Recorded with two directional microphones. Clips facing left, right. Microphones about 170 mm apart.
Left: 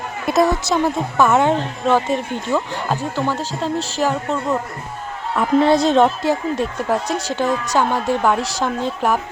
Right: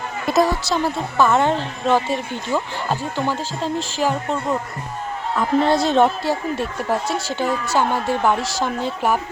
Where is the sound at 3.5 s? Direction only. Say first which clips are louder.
Left 2 dB; 40° left (ahead or behind).